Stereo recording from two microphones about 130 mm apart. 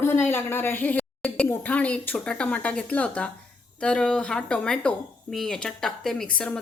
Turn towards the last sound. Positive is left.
turn(degrees=5)  # may be behind; listen again after turning